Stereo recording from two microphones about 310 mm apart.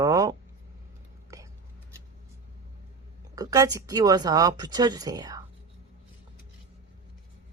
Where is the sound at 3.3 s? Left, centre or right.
Centre.